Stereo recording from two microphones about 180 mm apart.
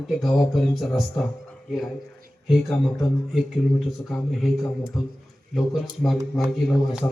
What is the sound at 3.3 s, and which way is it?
Speech, centre (ahead or behind).